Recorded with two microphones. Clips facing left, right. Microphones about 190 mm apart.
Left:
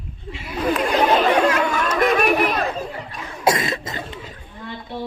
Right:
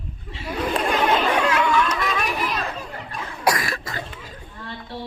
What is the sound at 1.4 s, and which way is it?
Chatter, 40° left (ahead or behind).